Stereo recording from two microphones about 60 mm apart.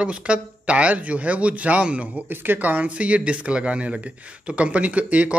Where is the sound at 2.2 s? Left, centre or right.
Right.